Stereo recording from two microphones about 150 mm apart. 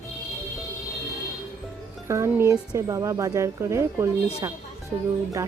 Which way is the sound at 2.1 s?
20° right (ahead or behind).